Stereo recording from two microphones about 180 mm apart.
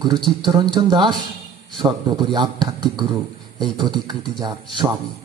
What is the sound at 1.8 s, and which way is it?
Speech, 25° right (ahead or behind).